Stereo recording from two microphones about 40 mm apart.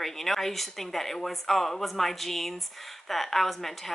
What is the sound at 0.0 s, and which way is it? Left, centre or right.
A woman's voice, centre.